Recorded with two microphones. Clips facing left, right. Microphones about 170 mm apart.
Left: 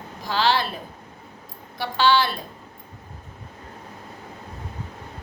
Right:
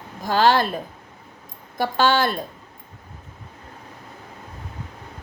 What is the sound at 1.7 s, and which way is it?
Speech, 45° right (ahead or behind).